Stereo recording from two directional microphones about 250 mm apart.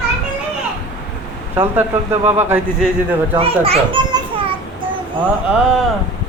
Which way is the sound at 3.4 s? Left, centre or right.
Right.